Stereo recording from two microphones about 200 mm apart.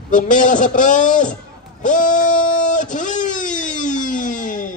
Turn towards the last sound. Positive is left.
turn(degrees=40)  # may be behind; listen again after turning